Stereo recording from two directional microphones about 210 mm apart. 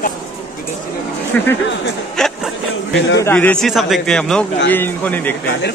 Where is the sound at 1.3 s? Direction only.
5° left (ahead or behind).